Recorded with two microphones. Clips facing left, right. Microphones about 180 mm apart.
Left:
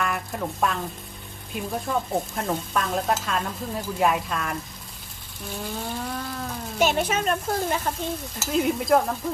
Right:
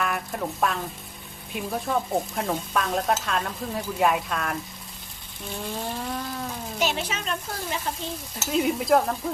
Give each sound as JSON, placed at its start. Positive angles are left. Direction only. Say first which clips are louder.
{"t": 0.0, "sound": "a sound", "louder": "even", "side_deg": 0}
{"t": 1.5, "sound": "stir", "louder": "even", "side_deg": 0}
{"t": 5.5, "sound": "stir", "louder": "even", "side_deg": 0}
{"t": 6.7, "sound": "speech", "louder": "left 6 dB", "side_deg": 50}
{"t": 8.4, "sound": "stir", "louder": "even", "side_deg": 0}